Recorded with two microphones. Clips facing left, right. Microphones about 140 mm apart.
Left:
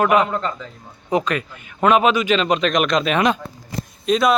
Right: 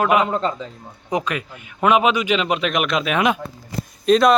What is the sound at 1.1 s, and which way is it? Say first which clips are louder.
A man's voice: left 3 dB; 10° right (ahead or behind).